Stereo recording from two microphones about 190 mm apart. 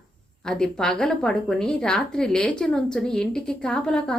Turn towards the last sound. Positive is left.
turn(degrees=5)  # may be behind; listen again after turning